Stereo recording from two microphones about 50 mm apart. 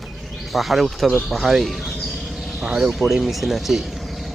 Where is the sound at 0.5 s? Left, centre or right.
Centre.